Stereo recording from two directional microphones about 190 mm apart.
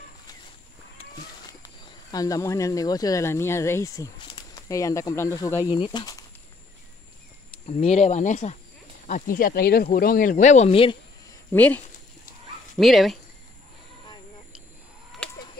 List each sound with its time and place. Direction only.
1.6 s speech: 20° left (ahead or behind)
7.6 s speech: 35° left (ahead or behind)
11.5 s speech: 10° left (ahead or behind)
15.2 s chicken: 5° left (ahead or behind)